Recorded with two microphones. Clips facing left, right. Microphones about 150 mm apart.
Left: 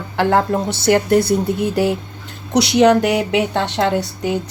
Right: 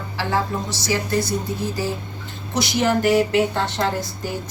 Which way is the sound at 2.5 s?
75° left (ahead or behind).